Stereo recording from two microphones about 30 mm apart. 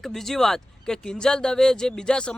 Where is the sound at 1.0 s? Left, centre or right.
Left.